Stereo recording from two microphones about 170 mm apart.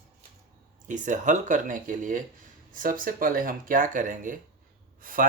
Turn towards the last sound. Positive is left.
turn(degrees=-55)  # may be behind; listen again after turning